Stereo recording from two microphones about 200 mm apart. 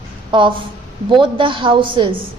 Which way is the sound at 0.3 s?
25° right (ahead or behind).